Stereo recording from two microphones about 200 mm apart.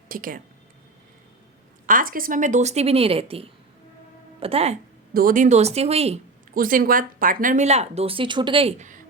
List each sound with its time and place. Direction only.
0.1 s speech: 45° right (ahead or behind)
1.9 s speech: 45° right (ahead or behind)
5.1 s speech: 45° right (ahead or behind)
6.5 s speech: 45° right (ahead or behind)